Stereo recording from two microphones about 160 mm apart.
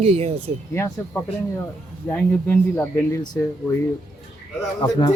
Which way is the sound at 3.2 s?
25° left (ahead or behind).